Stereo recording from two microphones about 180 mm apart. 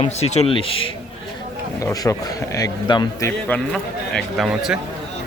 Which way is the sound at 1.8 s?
20° left (ahead or behind).